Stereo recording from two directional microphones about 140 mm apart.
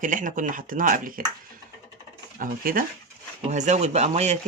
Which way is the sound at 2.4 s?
90° right.